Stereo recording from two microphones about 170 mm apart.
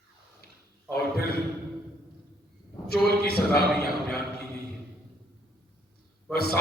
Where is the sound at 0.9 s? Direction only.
65° left (ahead or behind).